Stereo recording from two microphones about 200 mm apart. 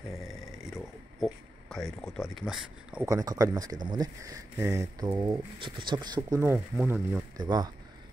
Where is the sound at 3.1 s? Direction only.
15° right (ahead or behind).